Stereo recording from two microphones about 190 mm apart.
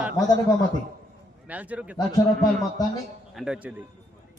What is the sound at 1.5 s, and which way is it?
Speech, 10° right (ahead or behind).